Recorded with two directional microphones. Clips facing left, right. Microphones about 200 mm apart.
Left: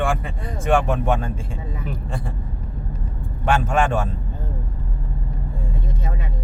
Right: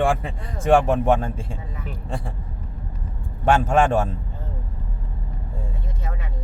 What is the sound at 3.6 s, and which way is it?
Speech, 40° right (ahead or behind).